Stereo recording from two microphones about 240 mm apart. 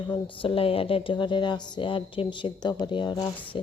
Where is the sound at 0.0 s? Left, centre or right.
Left.